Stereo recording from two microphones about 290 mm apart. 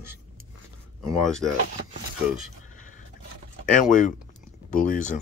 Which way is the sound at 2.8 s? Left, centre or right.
Left.